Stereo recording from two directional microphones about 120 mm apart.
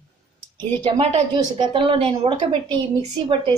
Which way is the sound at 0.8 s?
40° right (ahead or behind).